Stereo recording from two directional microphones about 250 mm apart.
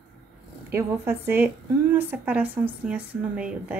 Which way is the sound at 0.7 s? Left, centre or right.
Centre.